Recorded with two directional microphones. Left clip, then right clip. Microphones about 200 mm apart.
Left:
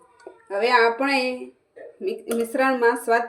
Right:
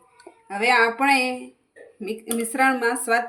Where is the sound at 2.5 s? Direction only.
50° right (ahead or behind).